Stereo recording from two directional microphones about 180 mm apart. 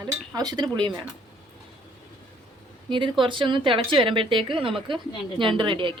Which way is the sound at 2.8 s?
25° right (ahead or behind).